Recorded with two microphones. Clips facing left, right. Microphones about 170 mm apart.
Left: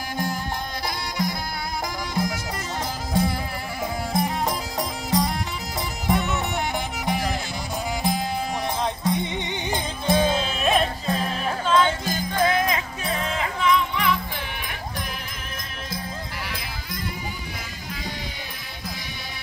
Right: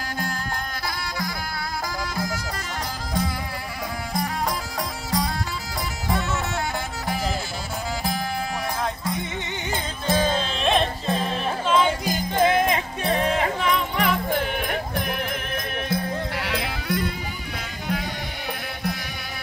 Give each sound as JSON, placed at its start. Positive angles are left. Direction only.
{"t": 0.8, "sound": "music", "side_deg": 20}
{"t": 8.8, "sound": "music", "side_deg": 20}
{"t": 13.3, "sound": "music", "side_deg": -40}